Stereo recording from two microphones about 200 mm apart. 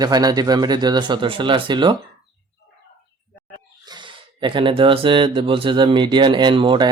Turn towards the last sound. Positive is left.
turn(degrees=-20)  # may be behind; listen again after turning